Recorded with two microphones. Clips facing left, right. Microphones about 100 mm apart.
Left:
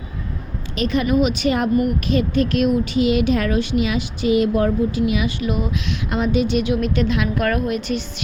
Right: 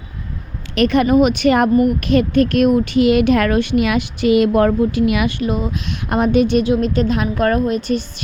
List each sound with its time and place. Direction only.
0.8 s speech: 65° right (ahead or behind)
1.0 s speech: 50° right (ahead or behind); by 5.3 s 65° right (ahead or behind)
5.4 s a woman's voice: 30° right (ahead or behind)
6.1 s a woman's voice: 55° right (ahead or behind)
6.7 s a woman's voice: 35° right (ahead or behind)